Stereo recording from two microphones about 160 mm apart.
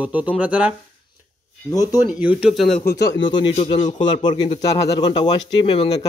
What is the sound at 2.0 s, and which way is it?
Speech, 10° right (ahead or behind).